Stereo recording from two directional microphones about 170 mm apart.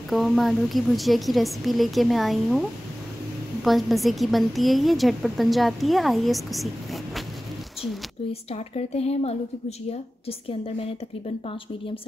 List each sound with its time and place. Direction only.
0.1 s a woman's voice: centre (ahead or behind)
3.6 s a woman's voice: centre (ahead or behind)
8.3 s a woman's voice: 35° left (ahead or behind)